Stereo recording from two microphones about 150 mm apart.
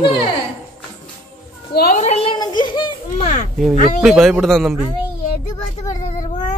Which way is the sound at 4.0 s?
5° right (ahead or behind).